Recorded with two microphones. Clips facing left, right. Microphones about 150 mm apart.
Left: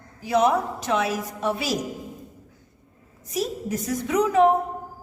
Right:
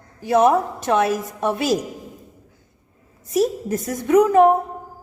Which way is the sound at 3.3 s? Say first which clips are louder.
Right 7 dB; 55° right (ahead or behind).